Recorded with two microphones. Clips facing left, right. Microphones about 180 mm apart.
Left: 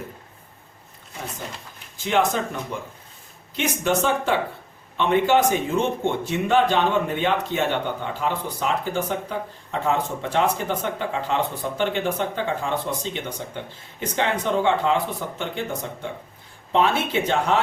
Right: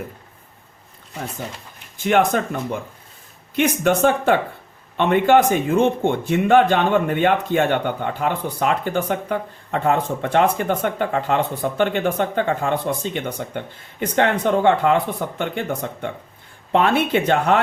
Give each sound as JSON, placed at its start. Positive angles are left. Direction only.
{"t": 2.0, "sound": "speech", "side_deg": -55}